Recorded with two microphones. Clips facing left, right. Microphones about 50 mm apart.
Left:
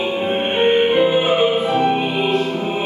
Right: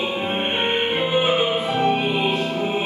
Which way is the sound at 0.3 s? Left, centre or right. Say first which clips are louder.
Left 8 dB; centre.